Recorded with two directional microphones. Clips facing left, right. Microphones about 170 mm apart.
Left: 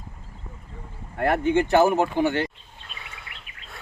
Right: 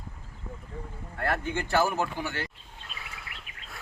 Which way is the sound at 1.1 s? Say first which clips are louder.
Left 9 dB; 20° left (ahead or behind).